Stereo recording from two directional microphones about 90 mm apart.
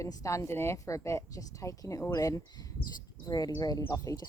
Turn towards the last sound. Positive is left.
turn(degrees=35)  # may be behind; listen again after turning